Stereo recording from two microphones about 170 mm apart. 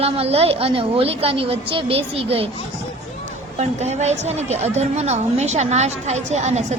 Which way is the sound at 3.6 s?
40° right (ahead or behind).